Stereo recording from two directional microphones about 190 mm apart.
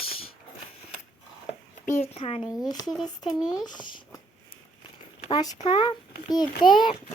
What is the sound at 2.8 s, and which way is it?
Speech, 5° right (ahead or behind).